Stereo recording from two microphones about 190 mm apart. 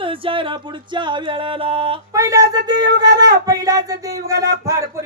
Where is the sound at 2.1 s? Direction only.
15° right (ahead or behind).